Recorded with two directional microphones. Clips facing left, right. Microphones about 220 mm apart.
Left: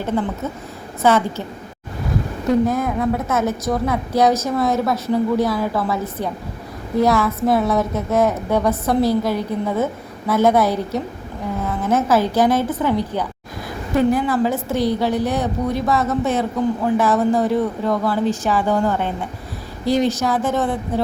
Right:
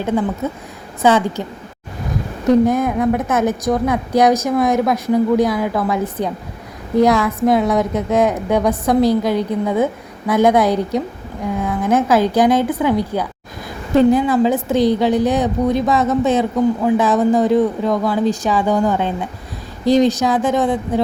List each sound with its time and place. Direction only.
1.0 s a woman's voice: 15° right (ahead or behind)
2.5 s a woman's voice: 20° right (ahead or behind)